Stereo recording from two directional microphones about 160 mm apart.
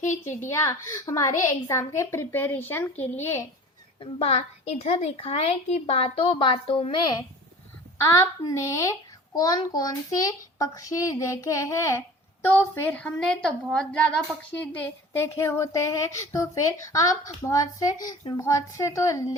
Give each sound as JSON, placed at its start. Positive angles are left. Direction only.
{"t": 0.1, "sound": "a woman's voice", "side_deg": 15}
{"t": 4.0, "sound": "a woman's voice", "side_deg": 40}